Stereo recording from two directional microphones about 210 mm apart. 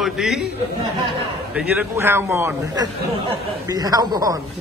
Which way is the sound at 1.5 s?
5° right (ahead or behind).